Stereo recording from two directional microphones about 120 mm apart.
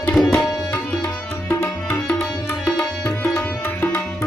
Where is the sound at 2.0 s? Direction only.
5° left (ahead or behind).